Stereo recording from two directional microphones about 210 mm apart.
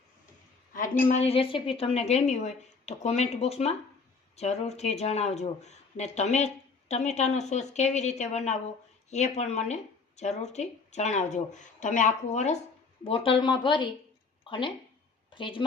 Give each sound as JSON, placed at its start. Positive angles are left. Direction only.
{"t": 0.7, "sound": "a woman's voice", "side_deg": 40}
{"t": 1.2, "sound": "a woman's voice", "side_deg": 25}